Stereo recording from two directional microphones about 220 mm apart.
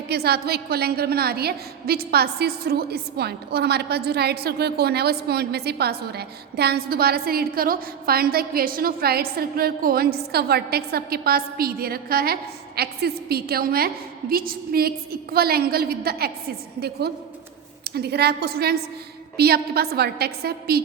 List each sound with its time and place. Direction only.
0.1 s a woman's voice: 45° right (ahead or behind)
17.8 s a woman's voice: 45° right (ahead or behind)